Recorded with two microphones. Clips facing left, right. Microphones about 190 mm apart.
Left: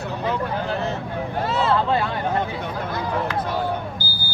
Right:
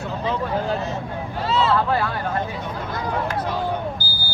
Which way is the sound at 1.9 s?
20° left (ahead or behind).